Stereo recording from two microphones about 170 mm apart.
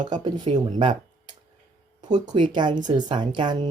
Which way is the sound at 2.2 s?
25° right (ahead or behind).